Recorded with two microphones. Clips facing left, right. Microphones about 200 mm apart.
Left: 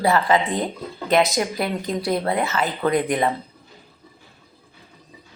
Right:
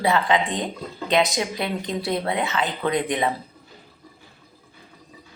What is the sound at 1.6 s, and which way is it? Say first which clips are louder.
Speech: left 2 dB; centre (ahead or behind).